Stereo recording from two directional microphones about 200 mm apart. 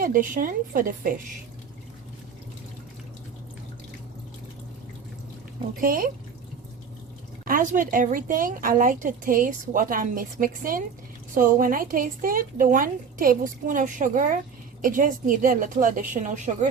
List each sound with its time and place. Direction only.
0.0 s speech: 45° right (ahead or behind)
5.8 s speech: 45° right (ahead or behind)
7.4 s a woman's voice: 40° right (ahead or behind)